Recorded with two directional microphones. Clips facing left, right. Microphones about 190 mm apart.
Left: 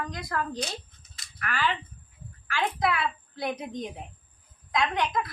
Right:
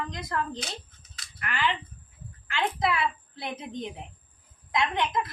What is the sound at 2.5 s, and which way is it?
A woman's voice, 20° right (ahead or behind).